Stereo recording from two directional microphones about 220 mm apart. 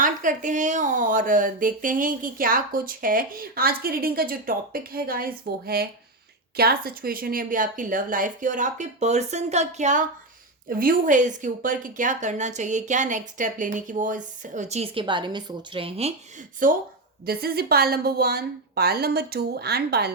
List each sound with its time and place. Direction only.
0.0 s speech: 35° right (ahead or behind)
16.6 s a woman's voice: 40° right (ahead or behind)